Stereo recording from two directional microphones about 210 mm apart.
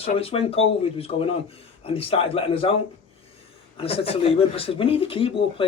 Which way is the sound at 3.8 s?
25° left (ahead or behind).